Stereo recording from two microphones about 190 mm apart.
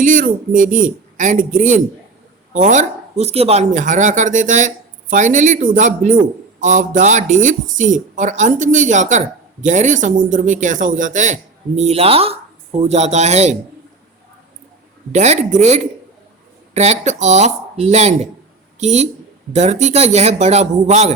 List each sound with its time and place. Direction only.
0.0 s speech: 45° right (ahead or behind)
15.1 s speech: 40° right (ahead or behind)